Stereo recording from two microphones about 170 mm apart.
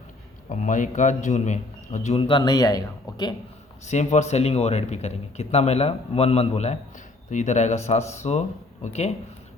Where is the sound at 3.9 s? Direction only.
45° left (ahead or behind).